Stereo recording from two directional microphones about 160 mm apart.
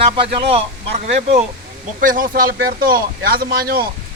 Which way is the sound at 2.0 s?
60° right (ahead or behind).